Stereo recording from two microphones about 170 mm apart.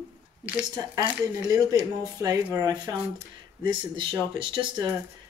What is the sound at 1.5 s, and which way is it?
Speech, 20° right (ahead or behind).